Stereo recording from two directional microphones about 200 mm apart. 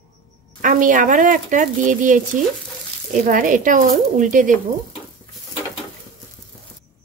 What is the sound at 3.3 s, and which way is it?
Speech, 40° right (ahead or behind).